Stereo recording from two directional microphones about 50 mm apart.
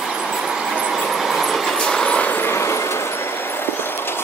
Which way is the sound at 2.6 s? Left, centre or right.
Left.